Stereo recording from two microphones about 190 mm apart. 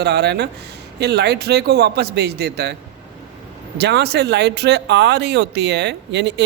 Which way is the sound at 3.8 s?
60° right (ahead or behind).